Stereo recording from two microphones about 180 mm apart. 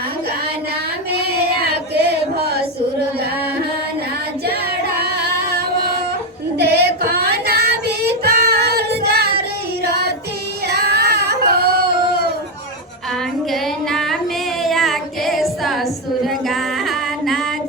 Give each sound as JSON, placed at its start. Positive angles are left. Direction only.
{"t": 1.6, "sound": "female singing", "side_deg": -60}
{"t": 4.9, "sound": "singing", "side_deg": -60}
{"t": 6.6, "sound": "child singing", "side_deg": -65}
{"t": 10.7, "sound": "a sound", "side_deg": -65}
{"t": 13.5, "sound": "female singing", "side_deg": 0}